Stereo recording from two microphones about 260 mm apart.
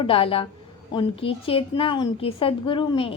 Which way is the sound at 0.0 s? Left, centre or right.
Left.